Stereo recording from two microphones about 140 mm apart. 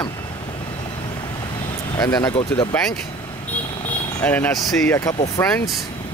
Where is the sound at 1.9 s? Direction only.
25° left (ahead or behind).